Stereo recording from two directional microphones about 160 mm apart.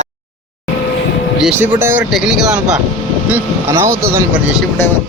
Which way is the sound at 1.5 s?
15° right (ahead or behind).